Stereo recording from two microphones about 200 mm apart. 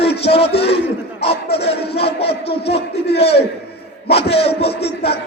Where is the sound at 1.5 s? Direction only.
30° left (ahead or behind).